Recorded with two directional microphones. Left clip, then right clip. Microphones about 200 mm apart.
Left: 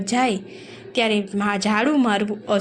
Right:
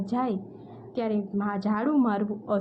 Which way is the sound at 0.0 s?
20° left (ahead or behind).